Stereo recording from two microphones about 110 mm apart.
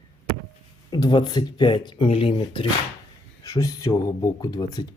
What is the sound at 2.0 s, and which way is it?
Speech, 60° left (ahead or behind).